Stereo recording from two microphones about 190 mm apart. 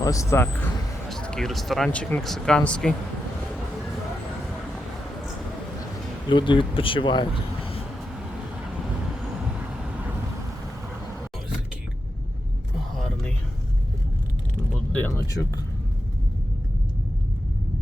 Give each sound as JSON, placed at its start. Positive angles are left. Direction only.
{"t": 0.0, "sound": "speech", "side_deg": 15}
{"t": 6.2, "sound": "speech", "side_deg": 25}